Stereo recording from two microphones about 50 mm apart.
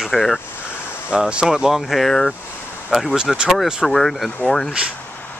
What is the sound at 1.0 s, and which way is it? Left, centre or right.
Speech, right.